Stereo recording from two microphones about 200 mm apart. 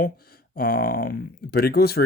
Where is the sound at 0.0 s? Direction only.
45° left (ahead or behind).